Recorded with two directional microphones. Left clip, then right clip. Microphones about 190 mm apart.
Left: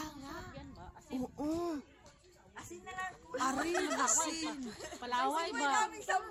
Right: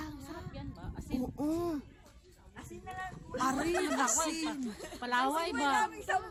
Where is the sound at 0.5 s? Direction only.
60° right (ahead or behind).